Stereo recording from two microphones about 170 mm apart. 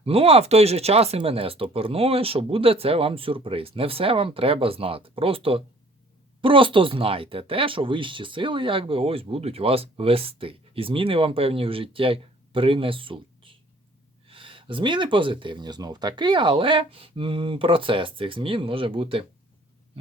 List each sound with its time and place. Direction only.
0.0 s speech: 35° right (ahead or behind)